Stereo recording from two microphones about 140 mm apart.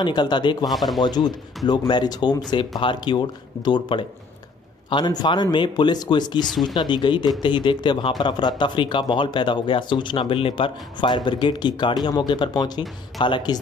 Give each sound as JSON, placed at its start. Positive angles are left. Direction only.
{"t": 0.0, "sound": "speech", "side_deg": 30}
{"t": 0.7, "sound": "speech", "side_deg": 0}
{"t": 1.0, "sound": "speech", "side_deg": 30}